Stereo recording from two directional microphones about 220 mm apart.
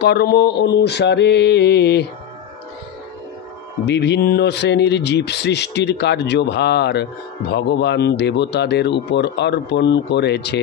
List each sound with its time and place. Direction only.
0.0 s speech: 50° left (ahead or behind)
3.8 s speech: 50° left (ahead or behind)